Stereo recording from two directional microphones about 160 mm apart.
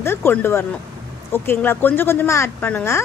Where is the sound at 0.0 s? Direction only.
15° left (ahead or behind).